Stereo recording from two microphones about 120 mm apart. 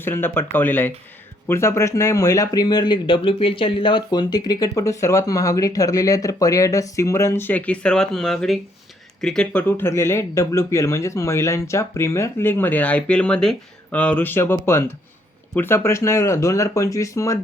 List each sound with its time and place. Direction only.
0.0 s speech: 20° left (ahead or behind)